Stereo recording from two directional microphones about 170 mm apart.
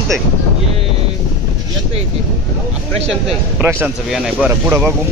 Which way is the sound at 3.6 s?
10° right (ahead or behind).